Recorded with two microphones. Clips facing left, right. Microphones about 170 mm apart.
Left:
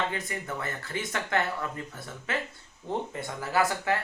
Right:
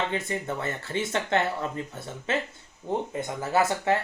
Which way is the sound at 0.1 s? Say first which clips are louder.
Right 5 dB; 25° right (ahead or behind).